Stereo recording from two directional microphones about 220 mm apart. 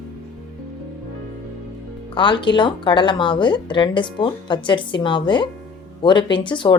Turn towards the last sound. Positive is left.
turn(degrees=20)  # may be behind; listen again after turning